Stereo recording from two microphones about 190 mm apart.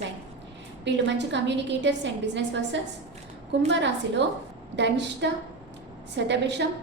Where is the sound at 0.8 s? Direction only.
70° right (ahead or behind).